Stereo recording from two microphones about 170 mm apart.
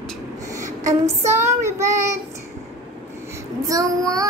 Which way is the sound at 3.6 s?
20° right (ahead or behind).